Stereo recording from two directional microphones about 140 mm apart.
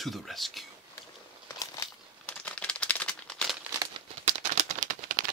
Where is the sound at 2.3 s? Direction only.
10° left (ahead or behind).